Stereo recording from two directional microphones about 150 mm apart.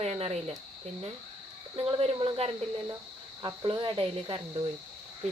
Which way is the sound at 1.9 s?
35° right (ahead or behind).